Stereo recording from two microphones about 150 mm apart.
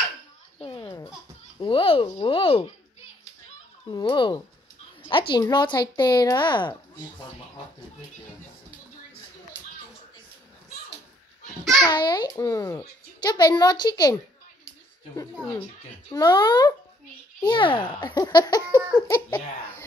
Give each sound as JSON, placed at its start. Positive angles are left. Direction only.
{"t": 0.6, "sound": "a sound", "side_deg": 35}
{"t": 1.6, "sound": "speech", "side_deg": 35}
{"t": 3.9, "sound": "a woman's voice", "side_deg": 30}
{"t": 11.6, "sound": "babbling", "side_deg": 5}
{"t": 11.9, "sound": "a child's voice", "side_deg": 30}
{"t": 16.1, "sound": "a child's voice", "side_deg": 25}